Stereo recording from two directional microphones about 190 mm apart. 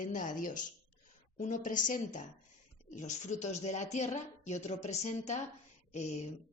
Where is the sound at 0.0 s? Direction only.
45° left (ahead or behind).